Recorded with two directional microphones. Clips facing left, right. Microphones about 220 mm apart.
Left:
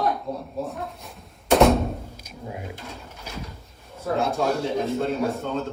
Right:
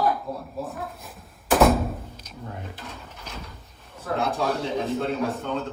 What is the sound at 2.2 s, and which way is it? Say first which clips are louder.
Drawer open or close: left 2 dB; 10° left (ahead or behind).